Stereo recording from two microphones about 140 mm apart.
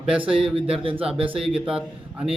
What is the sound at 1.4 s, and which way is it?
Speech, 5° right (ahead or behind).